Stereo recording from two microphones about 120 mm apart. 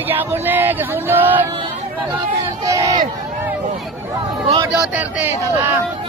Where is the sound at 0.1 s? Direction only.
15° right (ahead or behind).